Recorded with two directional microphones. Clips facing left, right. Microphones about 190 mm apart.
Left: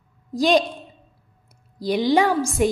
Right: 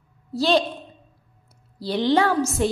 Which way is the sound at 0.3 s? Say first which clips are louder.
Left 2 dB; 15° left (ahead or behind).